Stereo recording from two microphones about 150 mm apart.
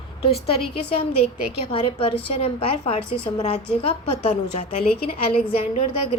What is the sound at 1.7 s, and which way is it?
A woman's voice, 40° left (ahead or behind).